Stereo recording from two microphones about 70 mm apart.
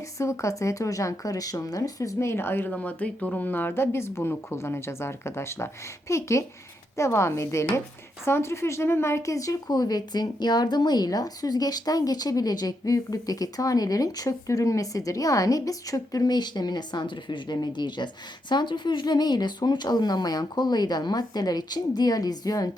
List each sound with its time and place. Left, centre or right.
0.2 s speech: left
2.1 s speech: left
2.7 s speech: centre; by 22.7 s left